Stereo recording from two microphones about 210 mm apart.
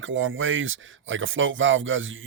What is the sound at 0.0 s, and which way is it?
Speech, 65° right (ahead or behind).